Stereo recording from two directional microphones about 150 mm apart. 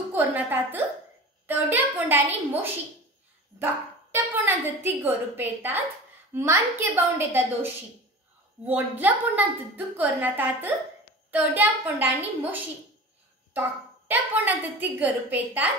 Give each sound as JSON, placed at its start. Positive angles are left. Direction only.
{"t": 0.1, "sound": "a woman's voice", "side_deg": -10}
{"t": 14.0, "sound": "a woman's voice", "side_deg": -10}